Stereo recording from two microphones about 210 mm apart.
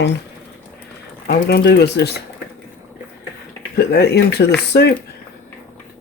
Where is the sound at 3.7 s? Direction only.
50° left (ahead or behind).